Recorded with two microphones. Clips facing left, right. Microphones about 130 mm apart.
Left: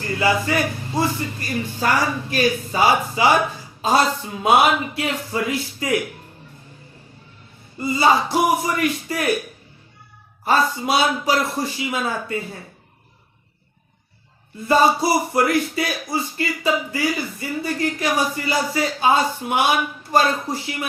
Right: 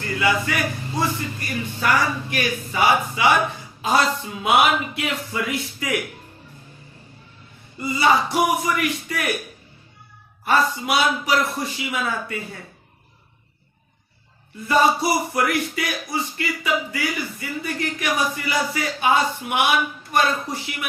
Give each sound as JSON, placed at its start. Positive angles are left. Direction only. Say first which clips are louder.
{"t": 0.0, "sound": "speech", "louder": "left 2 dB", "side_deg": 30}
{"t": 7.8, "sound": "speech", "louder": "left 2 dB", "side_deg": 25}
{"t": 10.4, "sound": "speech", "louder": "left 1 dB", "side_deg": 25}
{"t": 14.7, "sound": "speech", "louder": "left 2 dB", "side_deg": 25}